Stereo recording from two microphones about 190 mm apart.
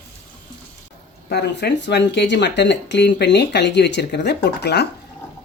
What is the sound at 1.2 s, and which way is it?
Speech, 60° left (ahead or behind).